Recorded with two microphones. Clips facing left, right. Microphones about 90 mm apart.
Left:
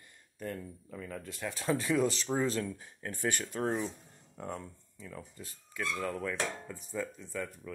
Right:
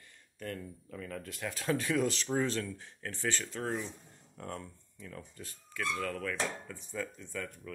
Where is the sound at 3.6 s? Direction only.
30° left (ahead or behind).